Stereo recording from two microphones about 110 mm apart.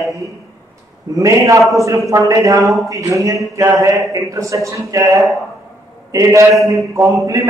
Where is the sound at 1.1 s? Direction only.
30° right (ahead or behind).